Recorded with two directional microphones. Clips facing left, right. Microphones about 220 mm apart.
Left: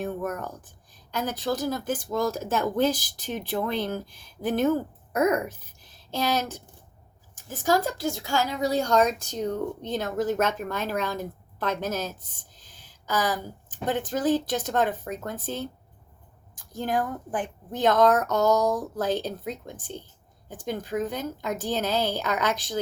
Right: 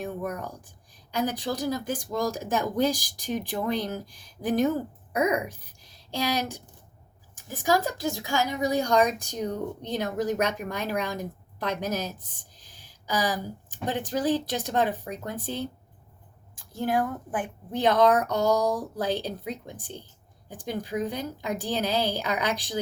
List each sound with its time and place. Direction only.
0.0 s speech: 10° right (ahead or behind)
12.5 s a sound: 10° right (ahead or behind)
13.8 s speech: 15° right (ahead or behind)
17.7 s speech: 10° right (ahead or behind)